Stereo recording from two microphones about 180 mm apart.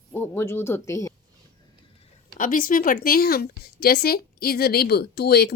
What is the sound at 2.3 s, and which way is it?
A woman's voice, 50° left (ahead or behind).